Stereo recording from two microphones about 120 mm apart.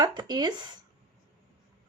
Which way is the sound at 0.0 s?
35° right (ahead or behind).